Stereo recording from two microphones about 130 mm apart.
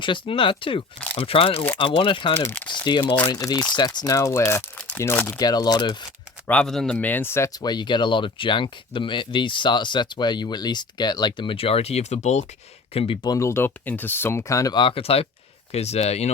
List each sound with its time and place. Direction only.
0.0 s speech: 40° left (ahead or behind)
2.4 s speech: 15° left (ahead or behind)
3.3 s speech: 30° left (ahead or behind)
5.4 s speech: 30° left (ahead or behind)
6.5 s speech: 5° left (ahead or behind)
7.6 s speech: 35° left (ahead or behind); by 12.5 s 60° left (ahead or behind)
12.9 s speech: 50° left (ahead or behind)
13.2 s speech: 25° left (ahead or behind); by 16.3 s 55° left (ahead or behind)